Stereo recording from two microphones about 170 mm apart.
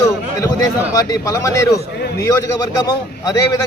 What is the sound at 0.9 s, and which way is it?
A man's voice, 20° left (ahead or behind).